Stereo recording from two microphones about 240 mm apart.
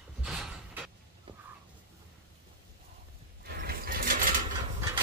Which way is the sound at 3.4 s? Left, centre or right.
Right.